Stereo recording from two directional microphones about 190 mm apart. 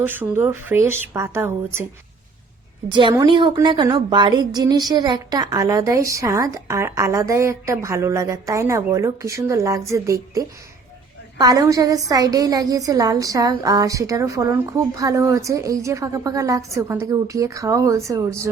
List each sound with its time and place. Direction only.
0.0 s a woman's voice: 10° right (ahead or behind)
2.9 s a woman's voice: 25° right (ahead or behind)